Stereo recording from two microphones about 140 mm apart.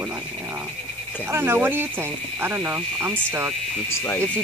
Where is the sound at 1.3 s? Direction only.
15° right (ahead or behind).